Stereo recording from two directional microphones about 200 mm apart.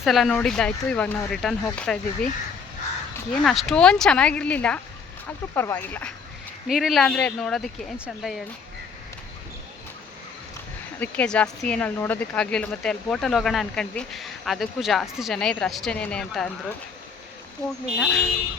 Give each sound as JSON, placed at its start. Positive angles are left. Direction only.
{"t": 0.0, "sound": "speech", "side_deg": 0}
{"t": 3.3, "sound": "speech", "side_deg": 0}
{"t": 11.0, "sound": "speech", "side_deg": 5}
{"t": 17.6, "sound": "speech", "side_deg": -15}
{"t": 18.0, "sound": "speech", "side_deg": 5}